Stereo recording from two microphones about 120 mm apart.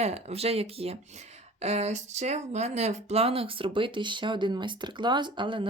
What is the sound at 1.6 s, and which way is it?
Speech, 65° right (ahead or behind).